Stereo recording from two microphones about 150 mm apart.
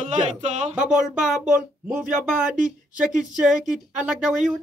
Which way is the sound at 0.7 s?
5° right (ahead or behind).